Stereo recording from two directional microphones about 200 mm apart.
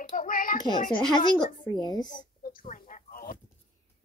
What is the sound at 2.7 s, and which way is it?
Speech, 40° left (ahead or behind).